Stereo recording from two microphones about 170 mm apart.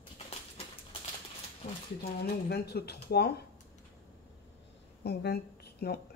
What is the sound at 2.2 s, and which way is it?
Speech, 70° left (ahead or behind).